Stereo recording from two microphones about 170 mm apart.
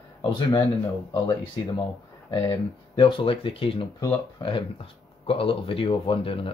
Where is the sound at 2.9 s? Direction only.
30° left (ahead or behind).